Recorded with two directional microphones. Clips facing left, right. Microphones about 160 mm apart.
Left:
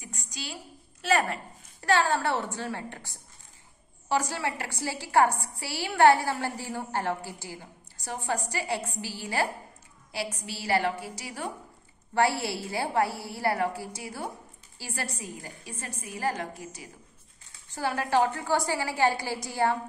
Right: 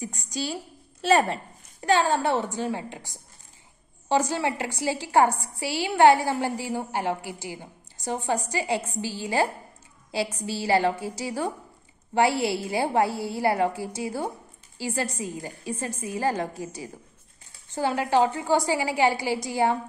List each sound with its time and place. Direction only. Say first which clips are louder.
0.0 s a woman's voice: right 10 dB; 35° right (ahead or behind)
12.1 s a woman's voice: right 4 dB; 20° right (ahead or behind)